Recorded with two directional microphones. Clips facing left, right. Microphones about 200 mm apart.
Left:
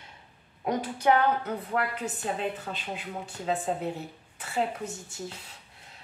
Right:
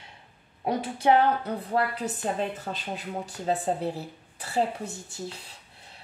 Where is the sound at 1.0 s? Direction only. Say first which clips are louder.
Right 2 dB; 35° right (ahead or behind).